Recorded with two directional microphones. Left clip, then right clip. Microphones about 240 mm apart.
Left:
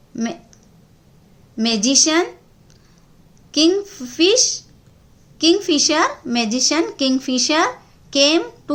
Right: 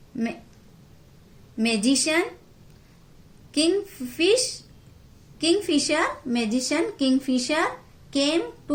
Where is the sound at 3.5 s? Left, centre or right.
Left.